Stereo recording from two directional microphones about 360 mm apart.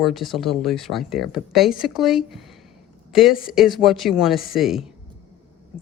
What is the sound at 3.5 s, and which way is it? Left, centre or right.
Speech, centre.